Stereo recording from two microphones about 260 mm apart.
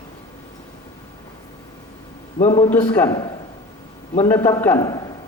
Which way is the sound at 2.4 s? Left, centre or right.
Left.